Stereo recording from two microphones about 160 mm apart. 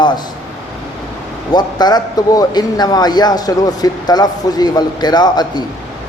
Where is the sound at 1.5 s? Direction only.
25° left (ahead or behind).